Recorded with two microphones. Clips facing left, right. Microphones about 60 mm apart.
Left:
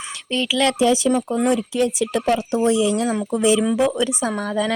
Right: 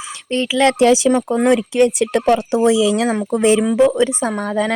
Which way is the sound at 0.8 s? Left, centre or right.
Right.